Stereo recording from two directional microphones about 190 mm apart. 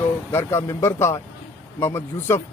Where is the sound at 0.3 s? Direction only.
15° left (ahead or behind).